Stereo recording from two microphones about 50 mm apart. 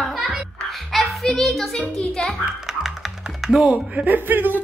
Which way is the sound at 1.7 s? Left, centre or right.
Centre.